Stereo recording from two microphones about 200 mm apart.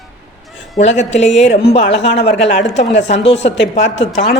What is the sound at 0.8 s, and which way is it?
Speech, 35° left (ahead or behind).